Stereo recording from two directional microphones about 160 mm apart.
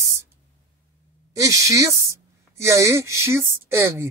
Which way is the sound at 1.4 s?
20° right (ahead or behind).